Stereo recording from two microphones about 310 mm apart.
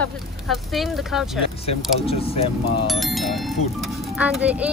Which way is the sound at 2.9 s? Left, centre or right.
Centre.